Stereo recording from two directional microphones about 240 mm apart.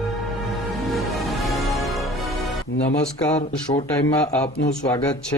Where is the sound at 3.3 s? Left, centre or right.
Left.